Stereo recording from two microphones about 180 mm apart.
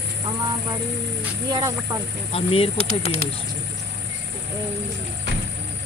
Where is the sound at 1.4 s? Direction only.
20° right (ahead or behind).